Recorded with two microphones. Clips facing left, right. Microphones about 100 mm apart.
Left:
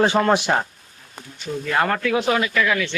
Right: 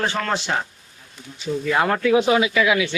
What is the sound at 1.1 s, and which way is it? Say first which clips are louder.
Speech: right 3 dB; 50° left (ahead or behind).